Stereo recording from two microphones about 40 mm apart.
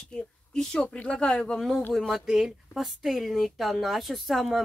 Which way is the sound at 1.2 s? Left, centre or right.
Centre.